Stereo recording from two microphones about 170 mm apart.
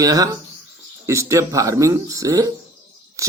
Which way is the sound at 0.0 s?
20° right (ahead or behind).